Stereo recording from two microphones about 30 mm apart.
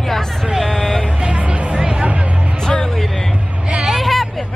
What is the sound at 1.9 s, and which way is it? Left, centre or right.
Music, right.